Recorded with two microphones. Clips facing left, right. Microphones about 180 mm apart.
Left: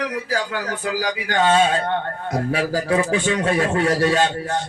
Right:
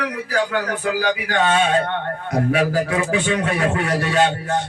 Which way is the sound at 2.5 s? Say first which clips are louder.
Left 2 dB; 35° left (ahead or behind).